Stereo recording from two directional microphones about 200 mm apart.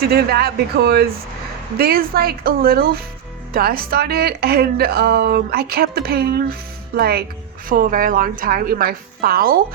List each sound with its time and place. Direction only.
0.1 s speech: 50° right (ahead or behind)